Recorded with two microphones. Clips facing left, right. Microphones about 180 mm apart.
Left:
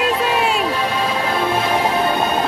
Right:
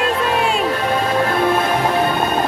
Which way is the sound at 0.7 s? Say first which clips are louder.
Right 3 dB; 50° right (ahead or behind).